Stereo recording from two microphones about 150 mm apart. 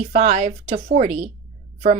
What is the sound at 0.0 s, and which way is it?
Speech, 50° right (ahead or behind).